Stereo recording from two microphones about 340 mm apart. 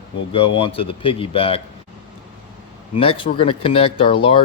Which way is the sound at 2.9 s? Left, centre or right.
Centre.